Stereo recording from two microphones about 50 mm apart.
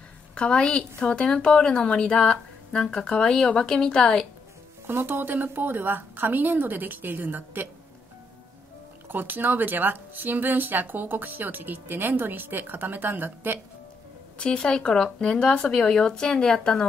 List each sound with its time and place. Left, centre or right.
0.3 s a woman's voice: left
4.8 s speech: right
9.1 s speech: right
14.4 s speech: centre